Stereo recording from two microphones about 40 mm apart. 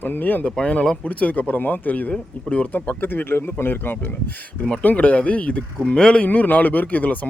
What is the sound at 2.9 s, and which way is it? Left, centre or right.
Speech, left.